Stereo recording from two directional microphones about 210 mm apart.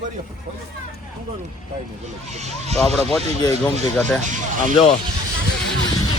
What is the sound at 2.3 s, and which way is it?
Speech, 30° right (ahead or behind).